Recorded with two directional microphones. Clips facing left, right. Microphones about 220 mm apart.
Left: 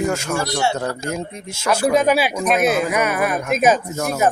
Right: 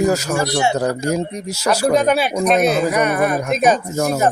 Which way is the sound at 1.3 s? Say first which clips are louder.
Right 7 dB; 40° right (ahead or behind).